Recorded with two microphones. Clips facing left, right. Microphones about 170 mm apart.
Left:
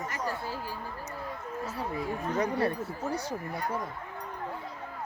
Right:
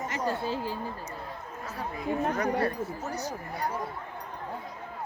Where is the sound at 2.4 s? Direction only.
30° left (ahead or behind).